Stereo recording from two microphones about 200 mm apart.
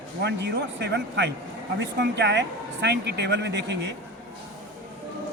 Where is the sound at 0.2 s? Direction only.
60° right (ahead or behind).